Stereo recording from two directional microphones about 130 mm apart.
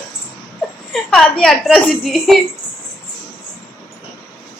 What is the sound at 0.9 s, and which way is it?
A woman's voice, 5° left (ahead or behind).